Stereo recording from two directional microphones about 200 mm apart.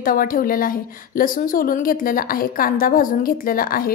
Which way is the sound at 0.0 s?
45° left (ahead or behind).